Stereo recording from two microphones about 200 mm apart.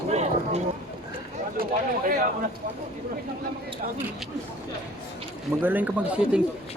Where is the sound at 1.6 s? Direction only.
40° right (ahead or behind).